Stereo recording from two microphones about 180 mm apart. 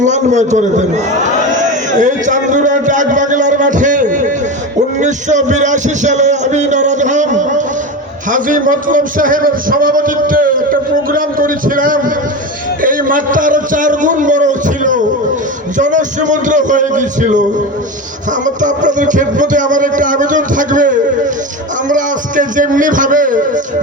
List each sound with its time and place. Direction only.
0.0 s a man's voice: 40° right (ahead or behind)
18.4 s a man's voice: 45° right (ahead or behind)